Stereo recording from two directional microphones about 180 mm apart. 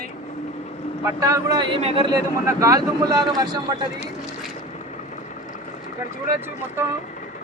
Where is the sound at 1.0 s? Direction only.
20° right (ahead or behind).